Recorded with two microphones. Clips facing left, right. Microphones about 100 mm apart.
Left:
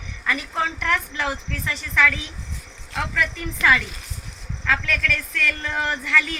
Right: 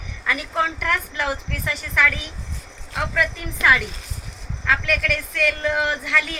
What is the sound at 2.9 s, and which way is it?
A woman's voice, 20° right (ahead or behind).